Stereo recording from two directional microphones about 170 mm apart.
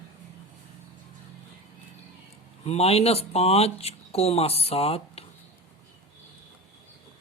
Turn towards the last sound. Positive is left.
turn(degrees=35)  # may be behind; listen again after turning